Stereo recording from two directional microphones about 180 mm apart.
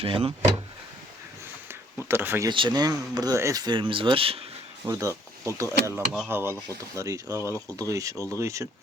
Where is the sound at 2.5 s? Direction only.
25° right (ahead or behind).